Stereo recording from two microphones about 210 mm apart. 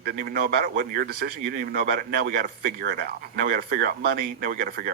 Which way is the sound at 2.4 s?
50° right (ahead or behind).